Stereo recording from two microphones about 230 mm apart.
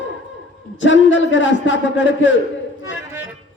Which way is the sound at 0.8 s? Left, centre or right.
Left.